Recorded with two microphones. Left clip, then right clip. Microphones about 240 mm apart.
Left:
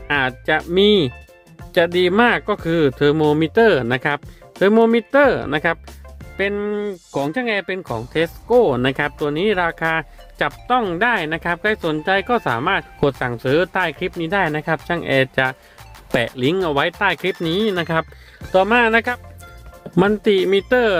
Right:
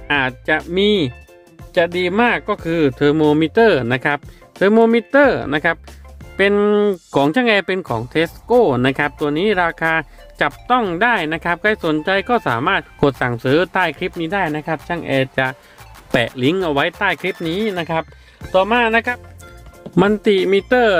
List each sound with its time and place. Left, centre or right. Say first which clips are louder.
0.1 s speech: right 1 dB; centre
6.3 s speech: right 7 dB; right; by 19.2 s centre
19.9 s speech: right 1 dB; centre